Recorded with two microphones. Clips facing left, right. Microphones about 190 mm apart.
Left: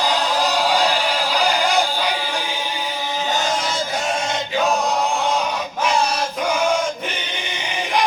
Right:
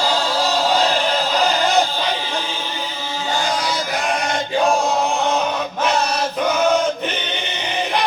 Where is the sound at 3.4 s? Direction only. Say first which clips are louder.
Right 1 dB; 25° left (ahead or behind).